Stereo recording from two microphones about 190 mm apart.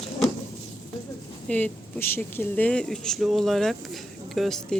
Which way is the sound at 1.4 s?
10° left (ahead or behind).